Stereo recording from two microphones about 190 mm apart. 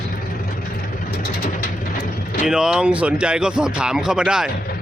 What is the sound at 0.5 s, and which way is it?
Vehicle, 45° left (ahead or behind).